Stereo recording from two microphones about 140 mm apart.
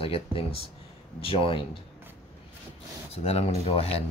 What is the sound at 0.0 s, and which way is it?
Speech, 40° left (ahead or behind).